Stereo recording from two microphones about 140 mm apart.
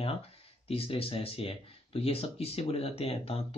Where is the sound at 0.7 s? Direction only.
45° left (ahead or behind).